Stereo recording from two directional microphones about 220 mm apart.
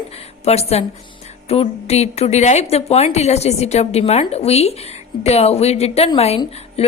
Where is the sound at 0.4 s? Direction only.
30° left (ahead or behind).